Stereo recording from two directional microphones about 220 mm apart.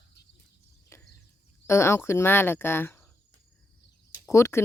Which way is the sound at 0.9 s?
10° left (ahead or behind).